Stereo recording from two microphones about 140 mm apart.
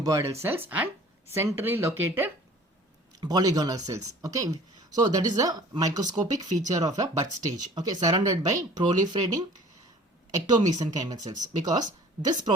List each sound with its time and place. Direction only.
0.0 s speech: 25° right (ahead or behind)
3.2 s a woman's voice: 25° right (ahead or behind)